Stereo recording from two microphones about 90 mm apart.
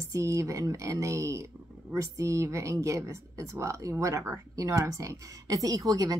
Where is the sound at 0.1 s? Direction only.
35° right (ahead or behind).